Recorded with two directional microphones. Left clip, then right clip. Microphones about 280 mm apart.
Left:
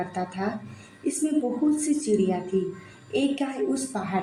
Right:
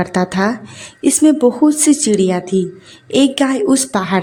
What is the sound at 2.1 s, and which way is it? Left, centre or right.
A woman's voice, right.